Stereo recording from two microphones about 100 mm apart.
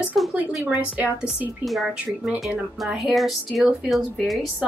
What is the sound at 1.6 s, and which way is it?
A woman's voice, centre (ahead or behind).